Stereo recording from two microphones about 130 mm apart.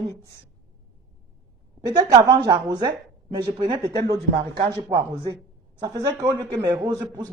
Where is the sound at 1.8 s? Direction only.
30° right (ahead or behind).